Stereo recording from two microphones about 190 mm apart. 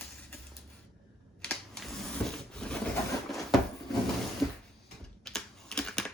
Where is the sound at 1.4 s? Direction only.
5° left (ahead or behind).